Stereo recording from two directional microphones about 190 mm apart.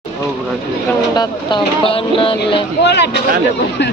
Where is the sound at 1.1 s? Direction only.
25° left (ahead or behind).